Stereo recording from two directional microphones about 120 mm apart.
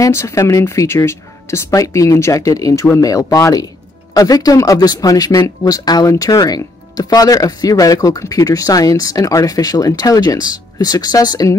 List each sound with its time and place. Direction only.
0.0 s speech: 25° left (ahead or behind)